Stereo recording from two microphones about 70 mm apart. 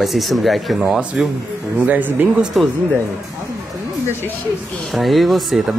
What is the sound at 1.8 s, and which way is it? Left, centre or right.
Speech, right.